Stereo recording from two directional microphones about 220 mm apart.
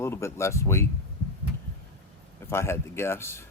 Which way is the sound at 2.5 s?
10° left (ahead or behind).